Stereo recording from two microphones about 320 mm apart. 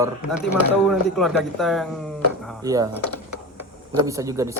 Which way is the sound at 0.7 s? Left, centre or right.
Centre.